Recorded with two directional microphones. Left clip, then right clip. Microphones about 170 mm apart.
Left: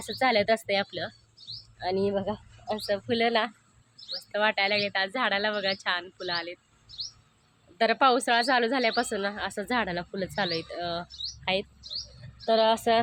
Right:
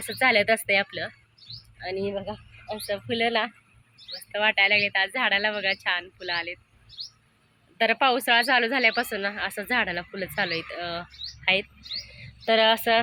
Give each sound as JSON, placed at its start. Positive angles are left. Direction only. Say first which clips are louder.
{"t": 0.0, "sound": "speech", "louder": "right 3 dB", "side_deg": 0}
{"t": 1.8, "sound": "speech", "louder": "left 2 dB", "side_deg": 15}
{"t": 2.8, "sound": "a woman's voice", "louder": "right 1 dB", "side_deg": 5}
{"t": 7.8, "sound": "a woman's voice", "louder": "even", "side_deg": 5}